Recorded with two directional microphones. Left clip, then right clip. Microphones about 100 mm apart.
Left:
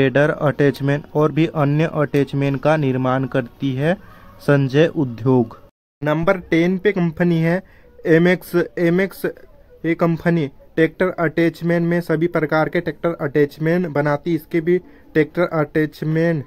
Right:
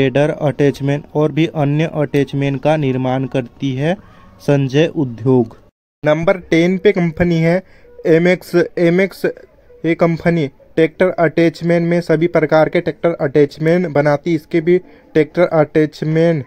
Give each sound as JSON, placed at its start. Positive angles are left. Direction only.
{"t": 0.0, "sound": "speech", "side_deg": 0}
{"t": 6.2, "sound": "a man's voice", "side_deg": -30}